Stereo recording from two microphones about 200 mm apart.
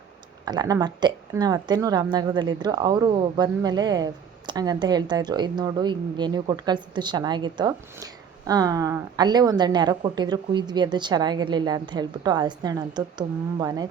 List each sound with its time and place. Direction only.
0.4 s a woman's voice: 20° right (ahead or behind)